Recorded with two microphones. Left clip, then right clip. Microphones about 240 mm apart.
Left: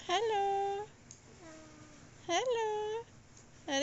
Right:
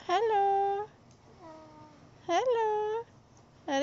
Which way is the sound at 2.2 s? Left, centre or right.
Centre.